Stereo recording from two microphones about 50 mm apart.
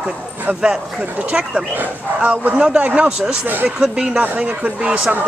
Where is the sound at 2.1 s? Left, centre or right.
Right.